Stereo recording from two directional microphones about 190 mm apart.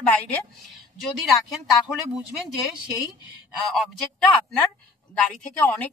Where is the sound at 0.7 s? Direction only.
Centre (ahead or behind).